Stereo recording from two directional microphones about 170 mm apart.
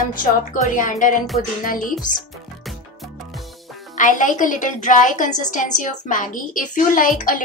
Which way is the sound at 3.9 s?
50° left (ahead or behind).